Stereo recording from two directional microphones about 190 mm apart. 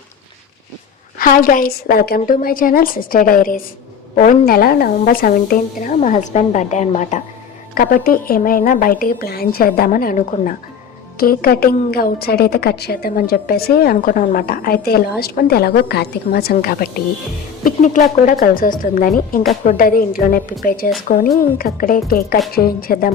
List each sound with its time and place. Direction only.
1.2 s a woman's voice: 45° left (ahead or behind)
7.8 s a woman's voice: 50° left (ahead or behind)